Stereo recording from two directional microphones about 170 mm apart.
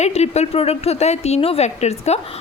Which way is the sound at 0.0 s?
40° left (ahead or behind).